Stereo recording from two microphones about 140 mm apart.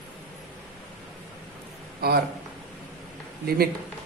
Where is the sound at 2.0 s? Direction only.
90° right.